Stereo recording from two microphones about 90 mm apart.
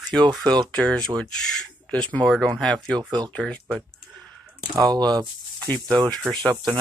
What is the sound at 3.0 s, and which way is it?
Speech, 55° right (ahead or behind).